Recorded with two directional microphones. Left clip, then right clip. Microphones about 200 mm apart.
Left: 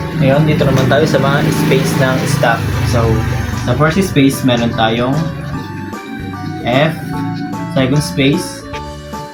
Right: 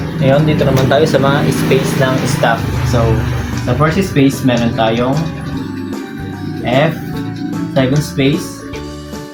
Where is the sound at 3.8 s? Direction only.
5° right (ahead or behind).